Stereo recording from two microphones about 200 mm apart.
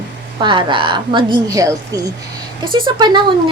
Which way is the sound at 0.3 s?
25° right (ahead or behind).